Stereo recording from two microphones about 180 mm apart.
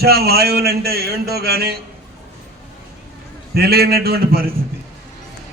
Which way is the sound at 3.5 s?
60° right (ahead or behind).